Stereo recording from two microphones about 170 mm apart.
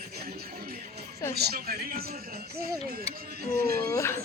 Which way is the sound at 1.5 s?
65° right (ahead or behind).